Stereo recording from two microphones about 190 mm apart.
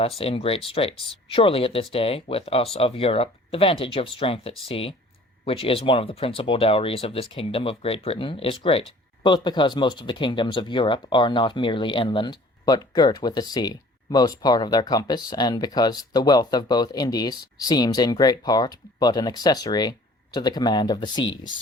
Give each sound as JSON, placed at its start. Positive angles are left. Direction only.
{"t": 0.0, "sound": "speech", "side_deg": 30}